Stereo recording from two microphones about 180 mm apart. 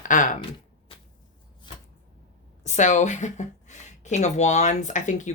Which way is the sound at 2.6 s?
40° left (ahead or behind).